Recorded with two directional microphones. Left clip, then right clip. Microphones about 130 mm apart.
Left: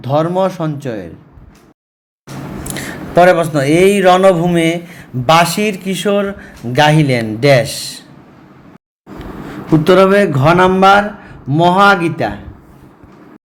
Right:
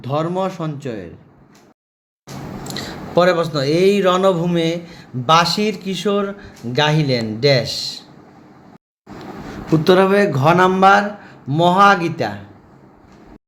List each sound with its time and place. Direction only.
0.0 s a man's voice: 20° left (ahead or behind)
2.6 s a man's voice: 20° left (ahead or behind)
9.1 s a man's voice: 10° left (ahead or behind)